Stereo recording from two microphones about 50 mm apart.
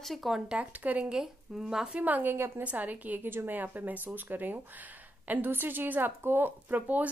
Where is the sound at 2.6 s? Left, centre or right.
Right.